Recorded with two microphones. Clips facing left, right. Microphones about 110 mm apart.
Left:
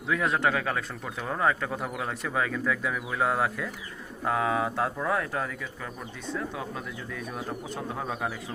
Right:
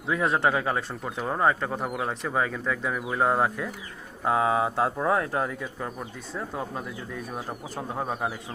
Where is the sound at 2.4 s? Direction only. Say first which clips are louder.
Even; 15° right (ahead or behind).